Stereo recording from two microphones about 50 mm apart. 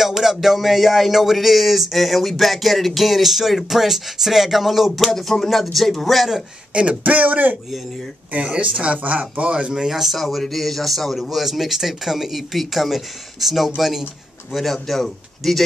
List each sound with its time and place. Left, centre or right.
0.0 s speech: centre
6.7 s speech: right
8.4 s speech: centre
9.7 s speech: centre